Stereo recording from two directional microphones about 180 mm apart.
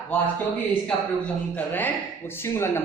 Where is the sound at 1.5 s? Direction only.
10° left (ahead or behind).